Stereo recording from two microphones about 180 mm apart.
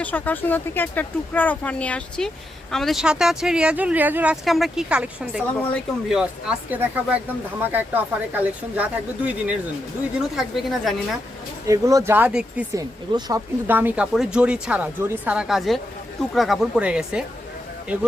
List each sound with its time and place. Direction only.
0.0 s speech: 10° left (ahead or behind)
11.6 s speech: 20° right (ahead or behind)
12.7 s speech: 20° right (ahead or behind); by 17.2 s 5° right (ahead or behind)